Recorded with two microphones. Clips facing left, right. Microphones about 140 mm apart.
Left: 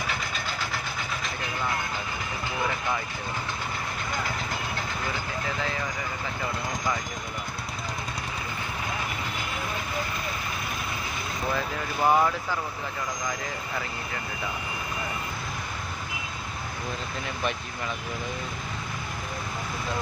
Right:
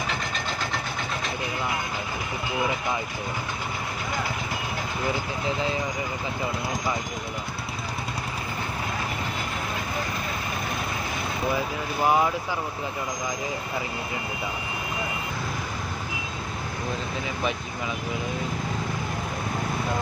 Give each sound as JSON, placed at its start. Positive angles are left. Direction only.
{"t": 5.5, "sound": "speech", "side_deg": -20}
{"t": 12.0, "sound": "speech", "side_deg": -10}